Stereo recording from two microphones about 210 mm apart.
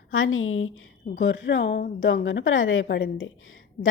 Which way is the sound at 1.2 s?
60° left (ahead or behind).